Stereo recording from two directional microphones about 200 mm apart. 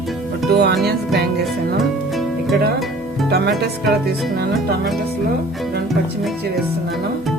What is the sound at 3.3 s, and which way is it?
Speech, 55° right (ahead or behind).